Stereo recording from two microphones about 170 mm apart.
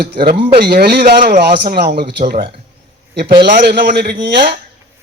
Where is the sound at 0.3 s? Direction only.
30° right (ahead or behind).